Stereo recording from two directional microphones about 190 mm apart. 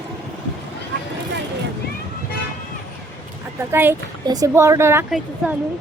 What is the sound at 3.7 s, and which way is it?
Speech, 10° right (ahead or behind).